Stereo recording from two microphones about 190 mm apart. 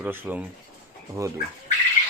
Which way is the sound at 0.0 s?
10° right (ahead or behind).